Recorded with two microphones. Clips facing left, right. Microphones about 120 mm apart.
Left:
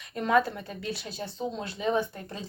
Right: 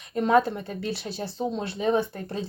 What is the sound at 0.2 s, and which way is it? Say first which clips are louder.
Speech: right 4 dB; 35° right (ahead or behind).